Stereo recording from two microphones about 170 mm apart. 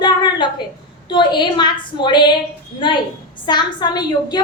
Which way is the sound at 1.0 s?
25° left (ahead or behind).